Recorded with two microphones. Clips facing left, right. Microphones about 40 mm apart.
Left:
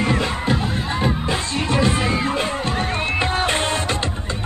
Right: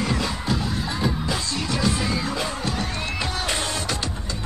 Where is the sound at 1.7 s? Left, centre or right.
Left.